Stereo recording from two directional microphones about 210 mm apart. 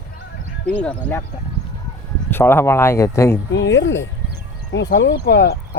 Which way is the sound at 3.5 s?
60° left (ahead or behind).